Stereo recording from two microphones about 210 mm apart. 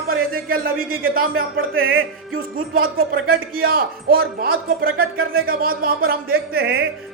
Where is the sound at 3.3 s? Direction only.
45° right (ahead or behind).